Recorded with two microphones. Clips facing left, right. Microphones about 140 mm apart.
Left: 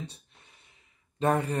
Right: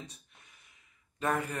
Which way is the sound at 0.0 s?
30° left (ahead or behind).